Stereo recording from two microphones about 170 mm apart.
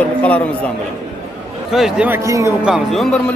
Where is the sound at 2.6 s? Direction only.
Centre (ahead or behind).